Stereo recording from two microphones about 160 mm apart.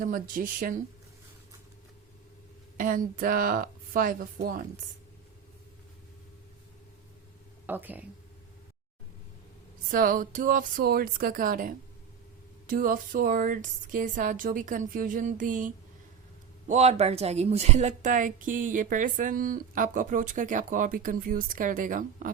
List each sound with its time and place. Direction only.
0.0 s a woman's voice: 60° right (ahead or behind)
2.7 s a woman's voice: 55° right (ahead or behind)
7.7 s speech: 10° right (ahead or behind)
9.9 s a woman's voice: 60° right (ahead or behind)